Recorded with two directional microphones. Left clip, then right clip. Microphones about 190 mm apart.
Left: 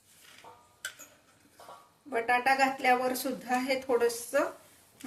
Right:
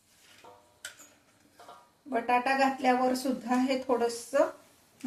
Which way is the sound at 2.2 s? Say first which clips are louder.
Even; 20° right (ahead or behind).